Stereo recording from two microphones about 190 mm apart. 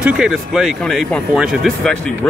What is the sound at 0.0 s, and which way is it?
Speech, centre (ahead or behind).